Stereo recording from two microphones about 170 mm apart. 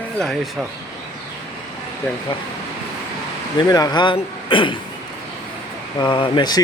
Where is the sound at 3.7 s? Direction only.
25° left (ahead or behind).